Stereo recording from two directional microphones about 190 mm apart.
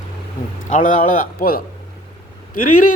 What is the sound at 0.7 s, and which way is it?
Speech, 45° left (ahead or behind).